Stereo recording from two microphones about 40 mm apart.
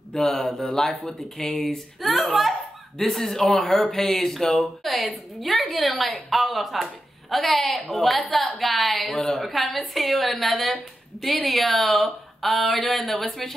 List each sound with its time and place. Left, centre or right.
0.1 s speech: centre
2.0 s speech: centre